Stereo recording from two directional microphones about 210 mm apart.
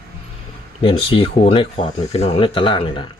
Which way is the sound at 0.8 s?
25° left (ahead or behind).